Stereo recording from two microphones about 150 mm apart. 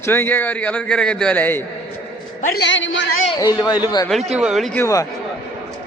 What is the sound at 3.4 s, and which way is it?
Speech, 25° left (ahead or behind).